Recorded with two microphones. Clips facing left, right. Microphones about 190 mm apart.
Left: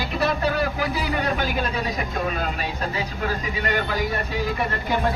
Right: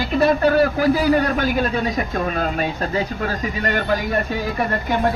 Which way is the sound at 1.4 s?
45° right (ahead or behind).